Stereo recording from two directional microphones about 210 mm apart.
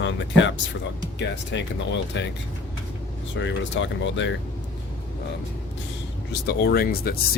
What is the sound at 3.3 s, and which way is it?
Speech, 60° left (ahead or behind).